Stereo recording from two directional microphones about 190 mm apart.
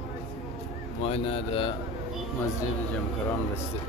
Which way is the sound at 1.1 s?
30° left (ahead or behind).